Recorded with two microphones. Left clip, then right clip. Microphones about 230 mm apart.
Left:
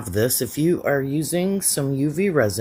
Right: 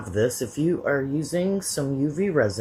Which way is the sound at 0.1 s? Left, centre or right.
Left.